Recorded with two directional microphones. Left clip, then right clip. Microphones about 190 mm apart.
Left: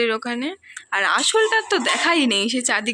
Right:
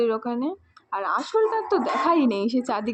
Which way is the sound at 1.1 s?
30° left (ahead or behind).